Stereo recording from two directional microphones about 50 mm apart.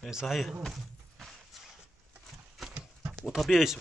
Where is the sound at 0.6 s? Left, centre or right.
Centre.